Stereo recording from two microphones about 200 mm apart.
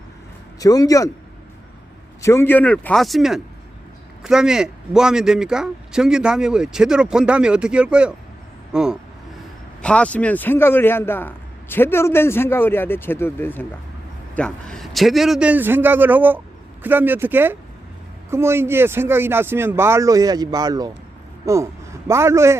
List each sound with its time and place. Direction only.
0.6 s a man's voice: 15° left (ahead or behind)
2.2 s a man's voice: 10° left (ahead or behind); by 22.5 s 15° right (ahead or behind)